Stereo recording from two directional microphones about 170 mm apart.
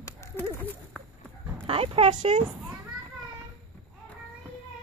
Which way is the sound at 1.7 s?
35° right (ahead or behind).